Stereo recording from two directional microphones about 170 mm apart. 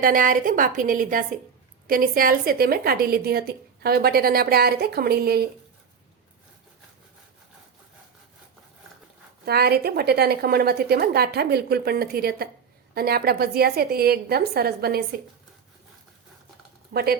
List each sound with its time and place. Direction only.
0.0 s a woman's voice: 55° right (ahead or behind)
9.5 s a woman's voice: 70° right (ahead or behind)
16.9 s a woman's voice: 65° right (ahead or behind)